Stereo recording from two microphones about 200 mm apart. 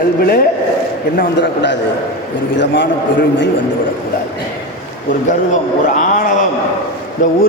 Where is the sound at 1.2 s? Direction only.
60° left (ahead or behind).